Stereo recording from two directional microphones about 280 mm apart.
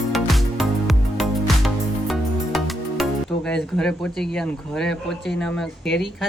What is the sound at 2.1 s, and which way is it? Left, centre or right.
Speech, centre.